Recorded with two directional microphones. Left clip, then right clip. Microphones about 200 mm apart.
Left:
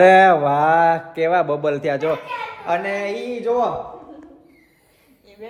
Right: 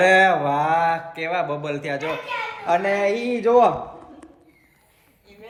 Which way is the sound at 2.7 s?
10° left (ahead or behind).